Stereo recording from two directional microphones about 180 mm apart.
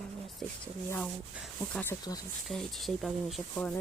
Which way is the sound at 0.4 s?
5° left (ahead or behind).